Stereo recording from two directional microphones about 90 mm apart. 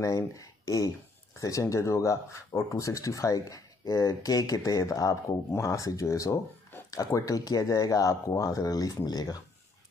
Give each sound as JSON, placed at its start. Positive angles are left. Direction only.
{"t": 0.0, "sound": "speech", "side_deg": 40}